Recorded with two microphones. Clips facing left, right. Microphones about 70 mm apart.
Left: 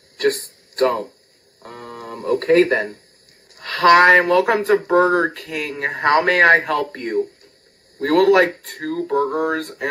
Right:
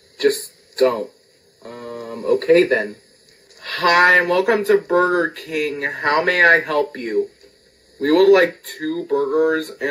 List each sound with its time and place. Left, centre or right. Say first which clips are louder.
0.7 s speech: right 2 dB; left